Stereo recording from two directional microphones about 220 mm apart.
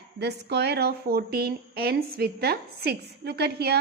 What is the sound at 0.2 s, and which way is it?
Speech, 50° right (ahead or behind).